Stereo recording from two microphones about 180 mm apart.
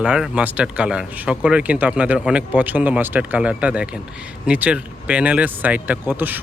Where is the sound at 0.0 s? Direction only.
5° right (ahead or behind).